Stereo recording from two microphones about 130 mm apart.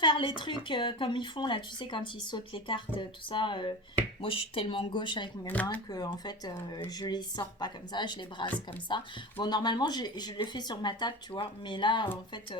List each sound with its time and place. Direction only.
0.0 s a woman's voice: 35° left (ahead or behind)